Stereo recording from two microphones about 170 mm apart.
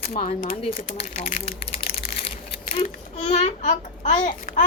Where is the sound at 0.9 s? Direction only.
45° left (ahead or behind).